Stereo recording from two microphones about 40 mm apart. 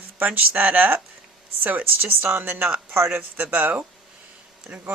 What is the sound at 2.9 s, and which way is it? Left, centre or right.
Speech, right.